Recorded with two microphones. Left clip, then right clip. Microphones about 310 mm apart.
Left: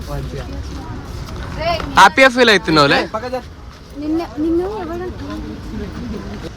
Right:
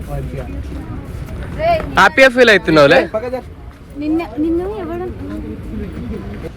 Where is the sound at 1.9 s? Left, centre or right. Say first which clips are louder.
Left 1 dB; centre.